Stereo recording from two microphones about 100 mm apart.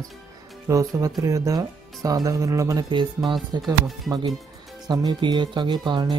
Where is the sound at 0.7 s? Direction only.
35° right (ahead or behind).